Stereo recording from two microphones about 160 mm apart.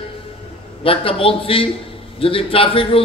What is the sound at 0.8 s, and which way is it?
A man's voice, 35° left (ahead or behind).